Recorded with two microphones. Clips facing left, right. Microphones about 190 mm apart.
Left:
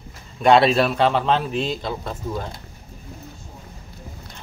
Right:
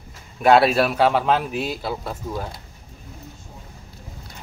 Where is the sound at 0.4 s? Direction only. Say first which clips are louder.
Even; 5° right (ahead or behind).